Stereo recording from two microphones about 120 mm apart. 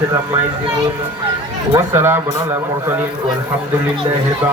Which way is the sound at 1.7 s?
20° right (ahead or behind).